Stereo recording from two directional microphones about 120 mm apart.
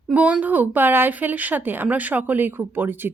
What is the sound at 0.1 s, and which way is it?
A woman's voice, 10° right (ahead or behind).